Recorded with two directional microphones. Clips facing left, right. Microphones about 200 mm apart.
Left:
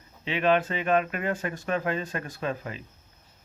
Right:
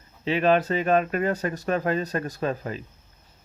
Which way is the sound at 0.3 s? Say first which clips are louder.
Right 3 dB; 40° right (ahead or behind).